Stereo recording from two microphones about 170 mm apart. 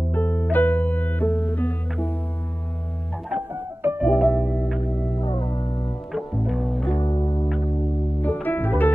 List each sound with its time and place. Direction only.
0.1 s music: 10° left (ahead or behind)
3.3 s music: 10° right (ahead or behind)
4.0 s music: centre (ahead or behind)
5.2 s music: 25° left (ahead or behind)
6.1 s music: centre (ahead or behind)
7.0 s music: 25° left (ahead or behind)
8.2 s music: 10° left (ahead or behind)